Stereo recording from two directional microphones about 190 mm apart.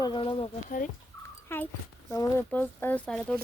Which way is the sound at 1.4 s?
10° left (ahead or behind).